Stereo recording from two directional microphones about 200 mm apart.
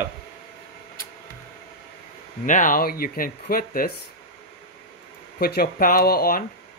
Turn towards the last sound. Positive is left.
turn(degrees=50)  # may be behind; listen again after turning